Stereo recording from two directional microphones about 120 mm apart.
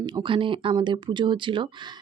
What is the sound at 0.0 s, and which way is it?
Speech, 40° right (ahead or behind).